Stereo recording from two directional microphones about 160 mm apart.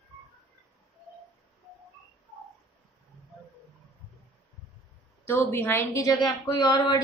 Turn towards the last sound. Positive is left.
turn(degrees=25)  # may be behind; listen again after turning